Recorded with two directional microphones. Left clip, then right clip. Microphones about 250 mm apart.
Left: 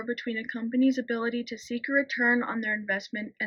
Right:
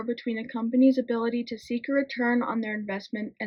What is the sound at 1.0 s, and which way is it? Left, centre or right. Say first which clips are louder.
Speech: right 2 dB; centre.